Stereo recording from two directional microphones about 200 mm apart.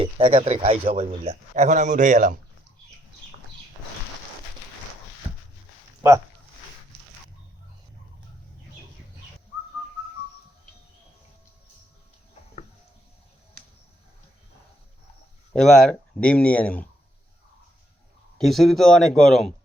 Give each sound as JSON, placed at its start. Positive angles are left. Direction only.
{"t": 0.0, "sound": "a man's voice", "side_deg": -30}
{"t": 6.0, "sound": "speech", "side_deg": -15}
{"t": 15.5, "sound": "speech", "side_deg": 0}
{"t": 18.3, "sound": "speech", "side_deg": 0}